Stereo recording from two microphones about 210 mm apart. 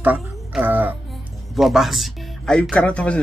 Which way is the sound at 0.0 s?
5° right (ahead or behind).